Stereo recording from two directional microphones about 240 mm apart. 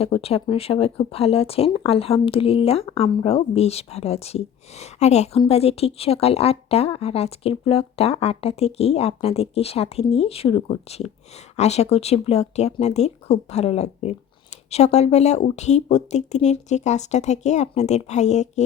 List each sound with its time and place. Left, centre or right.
0.0 s speech: left